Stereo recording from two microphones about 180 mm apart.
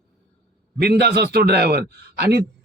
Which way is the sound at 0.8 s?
65° right (ahead or behind).